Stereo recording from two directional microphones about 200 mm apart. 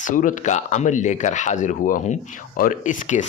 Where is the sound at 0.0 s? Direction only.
40° left (ahead or behind).